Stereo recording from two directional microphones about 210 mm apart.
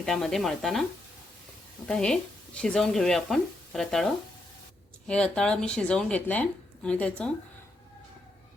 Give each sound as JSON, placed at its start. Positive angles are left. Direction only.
{"t": 0.0, "sound": "speech", "side_deg": 0}
{"t": 1.9, "sound": "speech", "side_deg": 5}